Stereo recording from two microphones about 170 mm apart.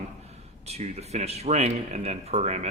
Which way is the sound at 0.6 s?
40° right (ahead or behind).